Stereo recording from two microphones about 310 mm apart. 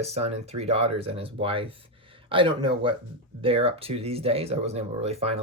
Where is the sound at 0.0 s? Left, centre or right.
Centre.